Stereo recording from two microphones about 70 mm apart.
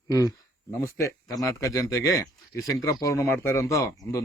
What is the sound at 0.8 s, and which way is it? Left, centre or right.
Speech, left.